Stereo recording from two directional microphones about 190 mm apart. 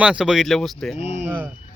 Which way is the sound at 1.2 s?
10° right (ahead or behind).